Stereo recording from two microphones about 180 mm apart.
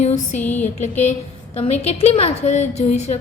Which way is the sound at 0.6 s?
40° left (ahead or behind).